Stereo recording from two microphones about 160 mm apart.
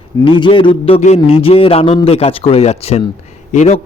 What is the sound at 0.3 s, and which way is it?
A man's voice, 30° left (ahead or behind).